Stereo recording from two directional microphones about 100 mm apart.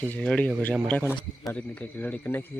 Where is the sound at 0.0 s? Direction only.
10° left (ahead or behind).